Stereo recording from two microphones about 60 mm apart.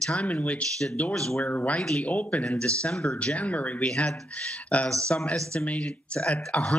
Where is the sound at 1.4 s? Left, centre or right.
Left; by 3.3 s centre.